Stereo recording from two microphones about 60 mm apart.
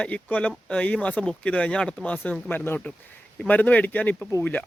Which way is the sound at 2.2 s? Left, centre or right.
Left.